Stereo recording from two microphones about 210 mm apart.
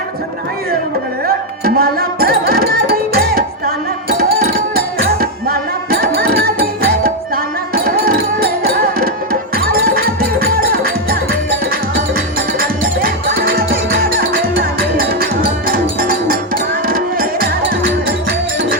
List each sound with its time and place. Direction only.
1.6 s music: 45° right (ahead or behind)